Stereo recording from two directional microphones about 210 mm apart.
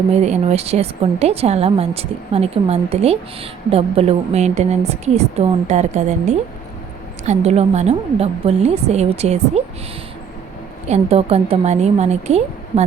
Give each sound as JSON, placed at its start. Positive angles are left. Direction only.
{"t": 0.1, "sound": "a woman's voice", "side_deg": -30}
{"t": 10.8, "sound": "a woman's voice", "side_deg": -30}